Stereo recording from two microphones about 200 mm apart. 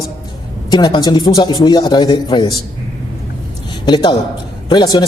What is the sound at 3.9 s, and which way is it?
Speech, 20° left (ahead or behind).